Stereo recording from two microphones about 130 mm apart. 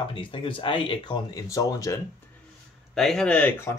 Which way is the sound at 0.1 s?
40° left (ahead or behind).